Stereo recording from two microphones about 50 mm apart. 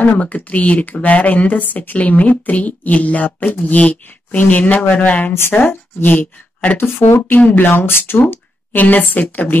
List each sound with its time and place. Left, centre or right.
0.0 s speech: left
8.7 s speech: left